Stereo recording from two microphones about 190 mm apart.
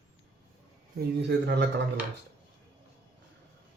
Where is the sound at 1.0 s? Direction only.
65° right (ahead or behind).